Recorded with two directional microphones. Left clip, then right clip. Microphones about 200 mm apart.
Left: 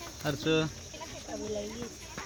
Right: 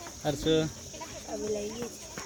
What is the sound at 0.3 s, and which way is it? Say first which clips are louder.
Speech: right 2 dB; 35° left (ahead or behind).